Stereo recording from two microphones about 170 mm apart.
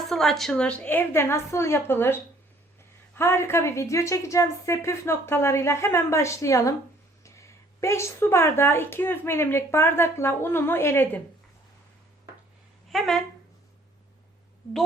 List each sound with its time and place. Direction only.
0.1 s a woman's voice: centre (ahead or behind)
3.2 s a woman's voice: 15° left (ahead or behind)
12.9 s speech: centre (ahead or behind)